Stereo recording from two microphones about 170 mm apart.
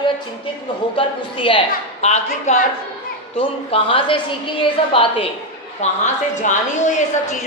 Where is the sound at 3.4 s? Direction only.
30° left (ahead or behind).